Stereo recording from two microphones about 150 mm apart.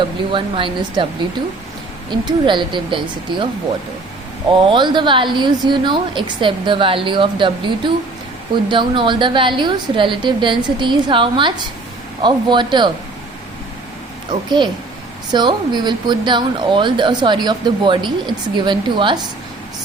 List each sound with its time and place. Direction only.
0.0 s speech: 35° right (ahead or behind)
2.2 s speech: 30° right (ahead or behind)
4.5 s speech: 35° right (ahead or behind)
15.3 s speech: 30° right (ahead or behind)